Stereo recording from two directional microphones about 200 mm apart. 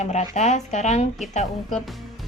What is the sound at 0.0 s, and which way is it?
Speech, 35° left (ahead or behind).